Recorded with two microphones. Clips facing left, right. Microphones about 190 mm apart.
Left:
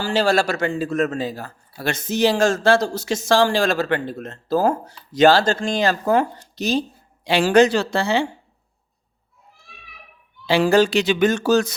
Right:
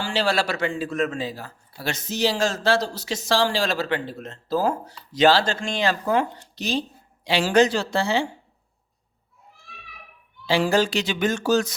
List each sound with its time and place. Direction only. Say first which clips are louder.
0.0 s a man's voice: left 5 dB; 45° left (ahead or behind)
7.3 s speech: left 4 dB; 55° left (ahead or behind)
10.4 s speech: left 5 dB; 60° left (ahead or behind)